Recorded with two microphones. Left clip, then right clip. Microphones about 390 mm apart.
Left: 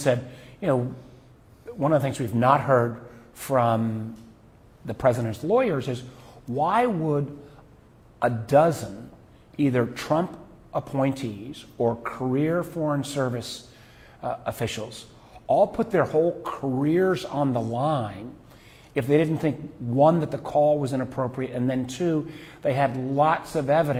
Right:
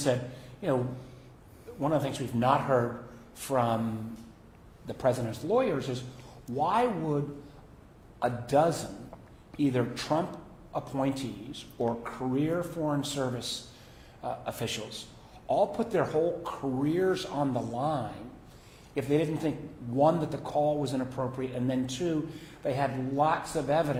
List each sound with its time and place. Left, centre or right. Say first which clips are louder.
0.0 s a man's voice: left 5 dB; left
1.8 s a man's voice: left 6 dB; left
4.9 s a man's voice: left 6 dB; left
8.2 s a man's voice: left 6 dB; left